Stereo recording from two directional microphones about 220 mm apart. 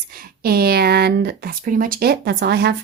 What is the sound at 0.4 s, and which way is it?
Speech, 45° right (ahead or behind).